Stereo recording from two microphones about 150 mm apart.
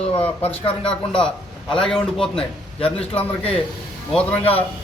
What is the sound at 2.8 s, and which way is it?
Speech, 40° left (ahead or behind).